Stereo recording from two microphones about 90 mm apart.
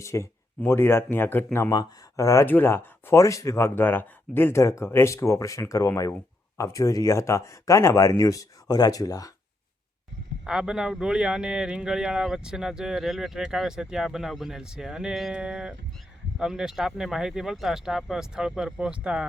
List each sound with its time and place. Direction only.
0.0 s speech: 30° left (ahead or behind)
1.7 s speech: 40° left (ahead or behind)
2.5 s speech: 25° left (ahead or behind); by 9.3 s 40° left (ahead or behind)
10.4 s speech: 10° right (ahead or behind)